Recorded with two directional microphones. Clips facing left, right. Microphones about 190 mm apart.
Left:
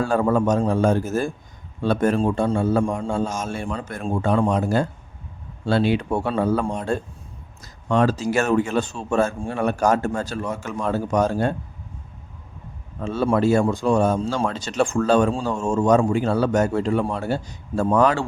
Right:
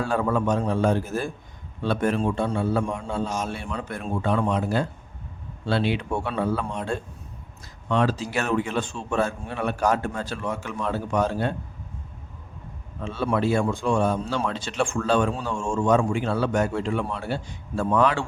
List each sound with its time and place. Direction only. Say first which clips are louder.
0.0 s a man's voice: left 4 dB; 40° left (ahead or behind)
13.0 s a man's voice: left 5 dB; 40° left (ahead or behind)